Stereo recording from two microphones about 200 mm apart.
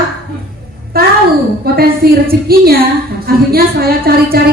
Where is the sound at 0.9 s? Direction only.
50° right (ahead or behind).